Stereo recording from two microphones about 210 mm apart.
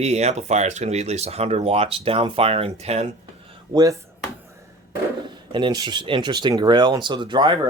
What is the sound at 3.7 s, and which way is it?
Speech, 15° right (ahead or behind).